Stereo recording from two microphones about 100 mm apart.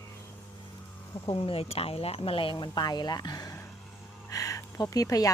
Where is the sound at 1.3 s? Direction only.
65° left (ahead or behind); by 3.6 s 40° left (ahead or behind).